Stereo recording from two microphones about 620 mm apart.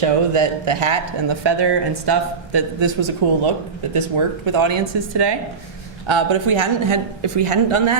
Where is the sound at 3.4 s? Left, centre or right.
Right.